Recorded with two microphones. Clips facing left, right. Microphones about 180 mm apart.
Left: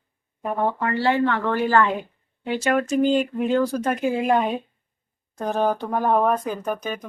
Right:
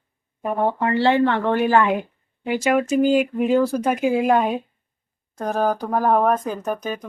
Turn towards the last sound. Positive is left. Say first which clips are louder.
# right 1 dB
turn(degrees=0)  # may be behind; listen again after turning